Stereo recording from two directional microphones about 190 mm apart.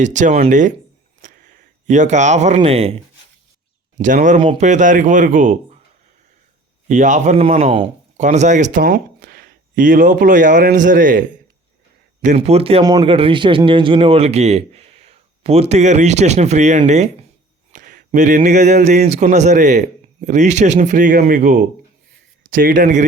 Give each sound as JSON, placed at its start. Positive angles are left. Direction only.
{"t": 0.0, "sound": "speech", "side_deg": -40}
{"t": 1.2, "sound": "a sound", "side_deg": -40}
{"t": 2.6, "sound": "speech", "side_deg": -30}
{"t": 6.8, "sound": "speech", "side_deg": -40}